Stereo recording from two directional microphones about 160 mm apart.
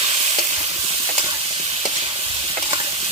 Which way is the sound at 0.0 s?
35° right (ahead or behind).